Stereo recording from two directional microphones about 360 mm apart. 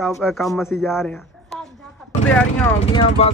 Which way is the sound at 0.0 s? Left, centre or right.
Centre.